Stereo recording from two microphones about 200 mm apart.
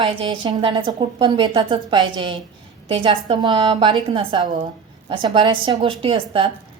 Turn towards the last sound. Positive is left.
turn(degrees=-25)  # may be behind; listen again after turning